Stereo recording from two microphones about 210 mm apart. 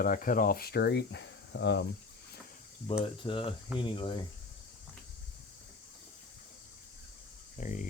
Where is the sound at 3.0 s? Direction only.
25° left (ahead or behind).